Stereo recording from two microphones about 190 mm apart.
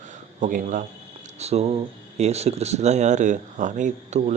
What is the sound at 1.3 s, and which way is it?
Speech, 35° right (ahead or behind).